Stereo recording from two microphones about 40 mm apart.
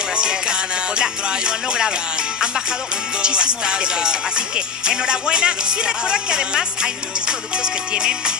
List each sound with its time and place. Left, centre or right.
0.1 s music: right
3.2 s music: right